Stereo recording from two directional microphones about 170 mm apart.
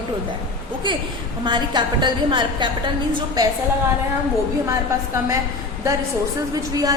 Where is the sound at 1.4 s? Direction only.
25° right (ahead or behind).